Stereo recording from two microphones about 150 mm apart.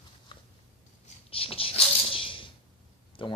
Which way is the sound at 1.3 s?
40° left (ahead or behind).